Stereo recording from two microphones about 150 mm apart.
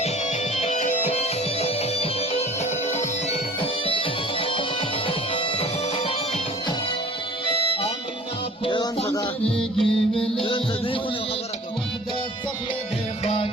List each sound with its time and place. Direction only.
0.0 s music: 45° left (ahead or behind)
3.2 s music: 35° left (ahead or behind)
9.6 s music: 5° left (ahead or behind)
10.4 s music: 35° left (ahead or behind)
13.2 s music: 40° left (ahead or behind)